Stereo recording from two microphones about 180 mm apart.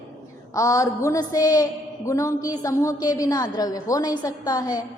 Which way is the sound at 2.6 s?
20° left (ahead or behind).